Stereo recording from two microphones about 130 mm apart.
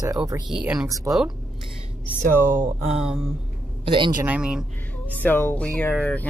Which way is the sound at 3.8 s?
40° right (ahead or behind).